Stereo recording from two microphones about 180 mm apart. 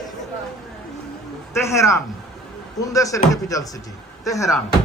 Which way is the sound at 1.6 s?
15° left (ahead or behind).